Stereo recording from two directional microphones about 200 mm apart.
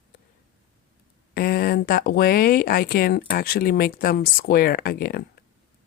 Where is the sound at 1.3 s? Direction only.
50° left (ahead or behind).